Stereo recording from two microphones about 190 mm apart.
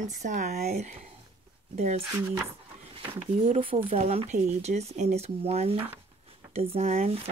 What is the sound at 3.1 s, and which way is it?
Speech, 30° right (ahead or behind).